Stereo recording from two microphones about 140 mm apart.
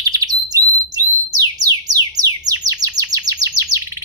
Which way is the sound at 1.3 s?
25° right (ahead or behind).